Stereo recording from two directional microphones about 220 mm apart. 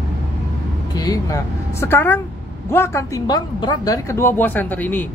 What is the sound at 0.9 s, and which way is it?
A woman's voice, 15° left (ahead or behind).